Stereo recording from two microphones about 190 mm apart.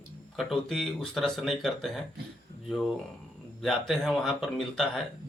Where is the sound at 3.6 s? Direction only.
Centre (ahead or behind).